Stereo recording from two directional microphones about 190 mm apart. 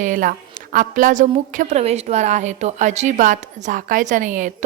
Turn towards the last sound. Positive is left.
turn(degrees=-45)  # may be behind; listen again after turning